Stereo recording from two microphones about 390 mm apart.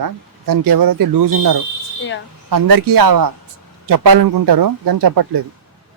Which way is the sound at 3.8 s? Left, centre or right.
Right.